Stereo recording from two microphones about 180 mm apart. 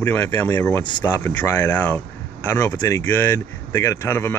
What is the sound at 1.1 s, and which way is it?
Speech, 10° left (ahead or behind).